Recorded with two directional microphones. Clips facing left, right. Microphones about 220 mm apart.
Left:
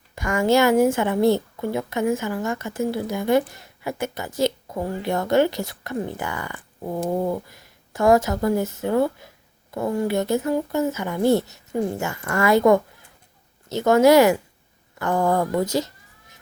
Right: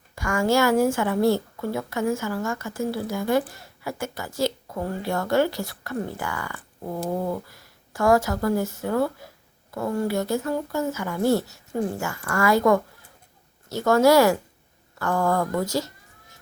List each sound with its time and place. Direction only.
0.2 s a woman's voice: 20° left (ahead or behind)